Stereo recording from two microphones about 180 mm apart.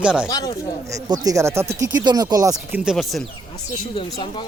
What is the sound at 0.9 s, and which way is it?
Speech, 20° right (ahead or behind).